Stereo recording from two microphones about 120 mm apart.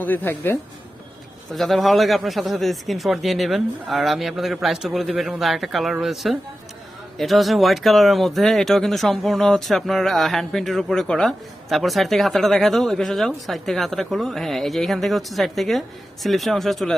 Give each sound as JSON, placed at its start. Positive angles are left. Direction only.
{"t": 0.0, "sound": "a woman's voice", "side_deg": 15}
{"t": 1.5, "sound": "speech", "side_deg": 0}